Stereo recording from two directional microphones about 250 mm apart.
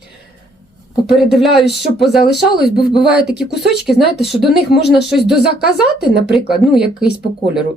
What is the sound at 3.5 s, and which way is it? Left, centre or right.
Speech, left.